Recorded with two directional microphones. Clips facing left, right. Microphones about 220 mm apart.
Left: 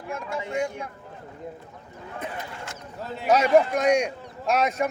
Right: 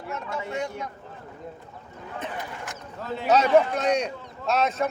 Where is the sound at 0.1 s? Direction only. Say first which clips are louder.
Left 2 dB; 10° left (ahead or behind).